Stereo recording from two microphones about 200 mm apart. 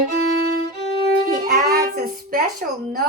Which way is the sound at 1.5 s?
50° right (ahead or behind).